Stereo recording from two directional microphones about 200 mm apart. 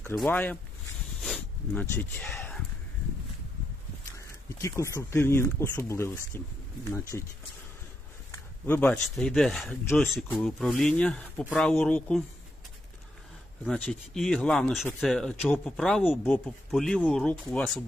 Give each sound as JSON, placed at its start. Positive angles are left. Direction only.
{"t": 0.0, "sound": "speech", "side_deg": 5}
{"t": 1.2, "sound": "a sound", "side_deg": 5}
{"t": 4.8, "sound": "speech", "side_deg": 15}
{"t": 8.3, "sound": "speech", "side_deg": 10}
{"t": 13.7, "sound": "speech", "side_deg": 0}